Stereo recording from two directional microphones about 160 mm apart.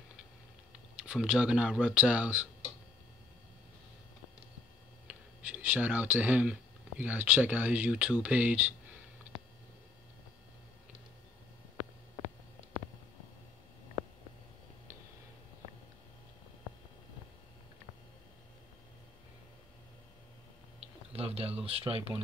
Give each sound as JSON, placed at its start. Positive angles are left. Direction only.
{"t": 1.0, "sound": "speech", "side_deg": -5}
{"t": 5.0, "sound": "speech", "side_deg": -10}
{"t": 20.8, "sound": "a sound", "side_deg": -40}